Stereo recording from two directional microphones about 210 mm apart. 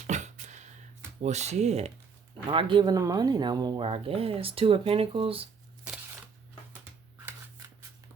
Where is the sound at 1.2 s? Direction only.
30° right (ahead or behind).